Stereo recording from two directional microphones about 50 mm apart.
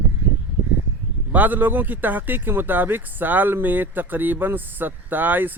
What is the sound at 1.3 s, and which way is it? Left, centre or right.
Speech, right.